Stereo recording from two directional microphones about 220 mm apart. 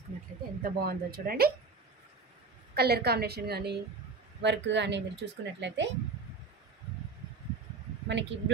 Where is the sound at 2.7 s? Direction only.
45° right (ahead or behind).